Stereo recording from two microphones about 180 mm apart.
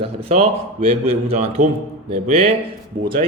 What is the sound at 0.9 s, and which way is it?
Speech, 35° right (ahead or behind).